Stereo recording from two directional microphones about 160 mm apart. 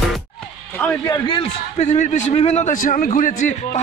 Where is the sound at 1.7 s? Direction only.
45° left (ahead or behind).